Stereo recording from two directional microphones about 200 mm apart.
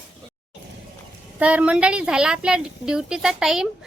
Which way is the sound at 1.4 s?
5° right (ahead or behind).